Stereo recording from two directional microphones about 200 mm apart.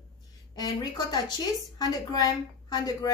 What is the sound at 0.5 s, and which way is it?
A woman's voice, 20° left (ahead or behind).